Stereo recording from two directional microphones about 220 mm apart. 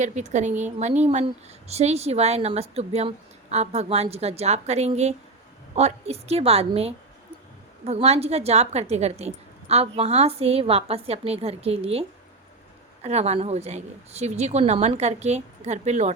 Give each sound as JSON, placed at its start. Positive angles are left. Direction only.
{"t": 0.0, "sound": "a woman's voice", "side_deg": -30}